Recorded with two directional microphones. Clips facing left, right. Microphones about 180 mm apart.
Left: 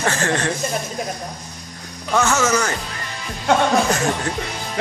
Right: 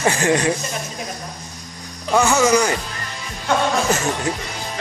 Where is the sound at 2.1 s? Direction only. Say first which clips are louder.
Right 3 dB; 10° right (ahead or behind).